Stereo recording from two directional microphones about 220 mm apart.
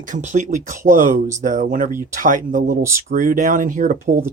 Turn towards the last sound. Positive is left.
turn(degrees=-35)  # may be behind; listen again after turning